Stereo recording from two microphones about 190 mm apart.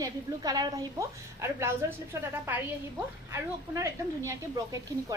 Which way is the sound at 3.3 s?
15° right (ahead or behind).